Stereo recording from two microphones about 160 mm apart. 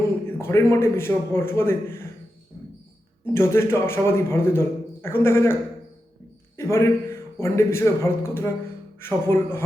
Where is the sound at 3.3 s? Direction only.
15° left (ahead or behind).